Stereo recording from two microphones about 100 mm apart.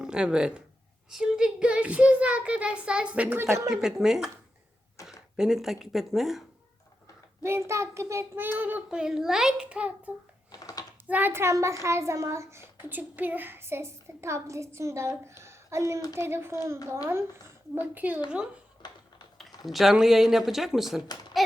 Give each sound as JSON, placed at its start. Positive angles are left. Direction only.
{"t": 0.0, "sound": "speech", "side_deg": -10}
{"t": 1.1, "sound": "child singing", "side_deg": -5}
{"t": 3.7, "sound": "speech", "side_deg": -5}
{"t": 5.0, "sound": "a sound", "side_deg": 30}
{"t": 5.4, "sound": "speech", "side_deg": -5}
{"t": 7.4, "sound": "a child's voice", "side_deg": -25}
{"t": 9.0, "sound": "child singing", "side_deg": -5}
{"t": 10.5, "sound": "typing", "side_deg": 40}
{"t": 11.1, "sound": "a child's voice", "side_deg": -20}
{"t": 17.7, "sound": "child singing", "side_deg": -15}
{"t": 18.8, "sound": "typing", "side_deg": 45}
{"t": 19.6, "sound": "speech", "side_deg": 0}